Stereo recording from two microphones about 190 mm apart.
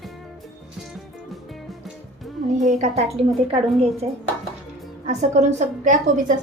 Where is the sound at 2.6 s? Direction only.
40° right (ahead or behind).